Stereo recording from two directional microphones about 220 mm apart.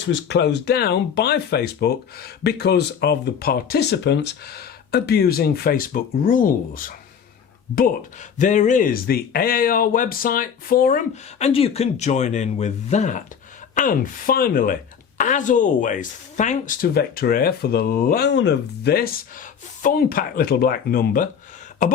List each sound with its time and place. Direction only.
0.0 s speech: 55° left (ahead or behind)
8.4 s speech: 35° left (ahead or behind)